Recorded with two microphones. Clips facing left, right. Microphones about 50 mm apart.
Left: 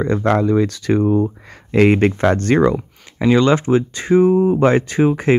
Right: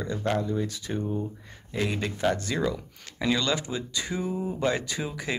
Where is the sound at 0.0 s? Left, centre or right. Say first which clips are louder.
Left 12 dB; left.